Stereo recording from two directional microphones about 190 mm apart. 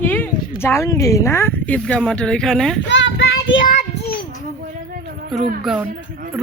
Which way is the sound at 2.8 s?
70° left (ahead or behind).